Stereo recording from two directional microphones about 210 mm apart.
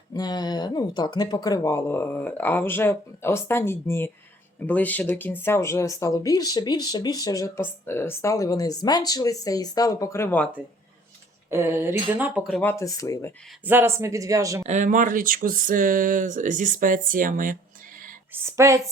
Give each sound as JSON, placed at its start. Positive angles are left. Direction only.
{"t": 0.1, "sound": "speech", "side_deg": 20}
{"t": 11.5, "sound": "speech", "side_deg": -10}
{"t": 12.5, "sound": "speech", "side_deg": 5}
{"t": 13.7, "sound": "speech", "side_deg": -10}
{"t": 14.7, "sound": "speech", "side_deg": -35}
{"t": 18.4, "sound": "speech", "side_deg": -15}